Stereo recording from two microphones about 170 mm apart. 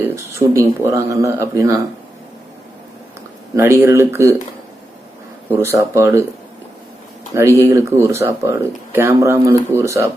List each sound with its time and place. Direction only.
0.0 s speech: 15° right (ahead or behind)
3.5 s speech: 15° right (ahead or behind)
5.5 s speech: 15° right (ahead or behind)
7.6 s speech: 15° right (ahead or behind)